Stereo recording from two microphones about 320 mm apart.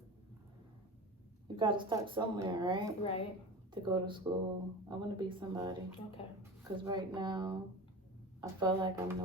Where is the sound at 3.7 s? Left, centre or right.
Centre.